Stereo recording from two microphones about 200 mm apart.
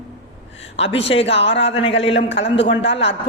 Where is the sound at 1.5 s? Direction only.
65° left (ahead or behind).